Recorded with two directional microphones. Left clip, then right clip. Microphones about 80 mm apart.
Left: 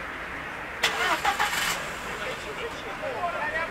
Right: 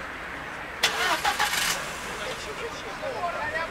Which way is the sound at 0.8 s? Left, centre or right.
Right.